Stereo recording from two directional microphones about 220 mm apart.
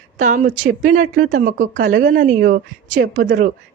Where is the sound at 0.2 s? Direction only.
35° right (ahead or behind).